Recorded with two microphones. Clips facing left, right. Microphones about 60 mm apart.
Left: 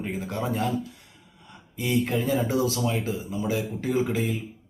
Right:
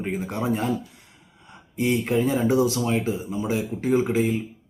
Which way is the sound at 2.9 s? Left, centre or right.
Right.